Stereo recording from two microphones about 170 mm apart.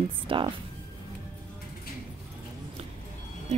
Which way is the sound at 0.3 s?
30° right (ahead or behind).